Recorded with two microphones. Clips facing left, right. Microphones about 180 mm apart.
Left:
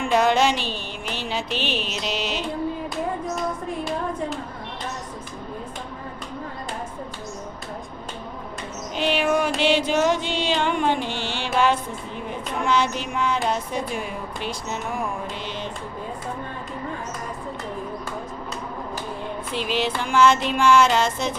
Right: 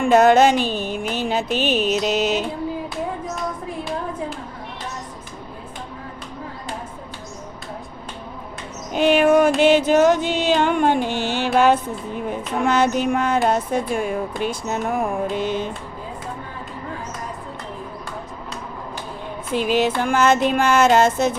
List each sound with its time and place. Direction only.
0.0 s speech: 50° right (ahead or behind)
8.9 s music: 45° right (ahead or behind)
12.6 s speech: 50° right (ahead or behind)
19.5 s speech: 45° right (ahead or behind)